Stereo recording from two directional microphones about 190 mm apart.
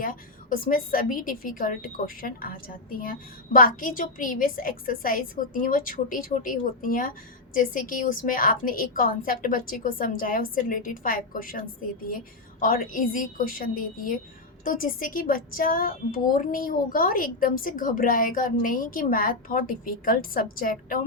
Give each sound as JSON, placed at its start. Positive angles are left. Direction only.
{"t": 0.0, "sound": "a woman's voice", "side_deg": 45}